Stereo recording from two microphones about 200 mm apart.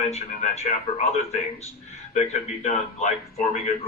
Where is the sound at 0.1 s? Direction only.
35° left (ahead or behind).